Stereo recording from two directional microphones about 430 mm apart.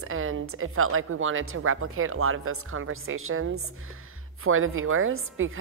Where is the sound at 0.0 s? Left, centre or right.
Right.